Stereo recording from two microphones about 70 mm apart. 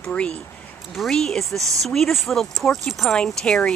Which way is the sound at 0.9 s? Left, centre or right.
Centre.